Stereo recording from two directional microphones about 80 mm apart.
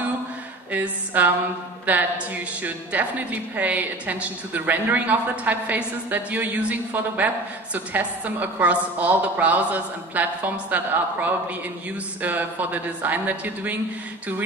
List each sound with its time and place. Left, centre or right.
0.7 s a woman's voice: centre